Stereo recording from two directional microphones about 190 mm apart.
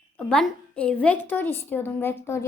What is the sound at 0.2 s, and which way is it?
A woman's voice, 5° left (ahead or behind).